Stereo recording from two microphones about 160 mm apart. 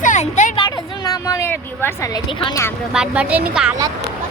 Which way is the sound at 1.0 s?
20° left (ahead or behind).